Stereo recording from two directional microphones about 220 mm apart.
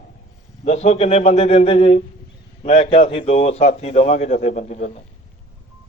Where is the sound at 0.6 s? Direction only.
30° left (ahead or behind).